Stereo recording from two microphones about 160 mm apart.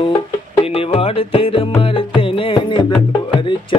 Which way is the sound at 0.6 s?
35° left (ahead or behind).